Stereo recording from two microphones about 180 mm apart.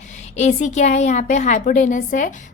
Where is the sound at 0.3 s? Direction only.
40° left (ahead or behind).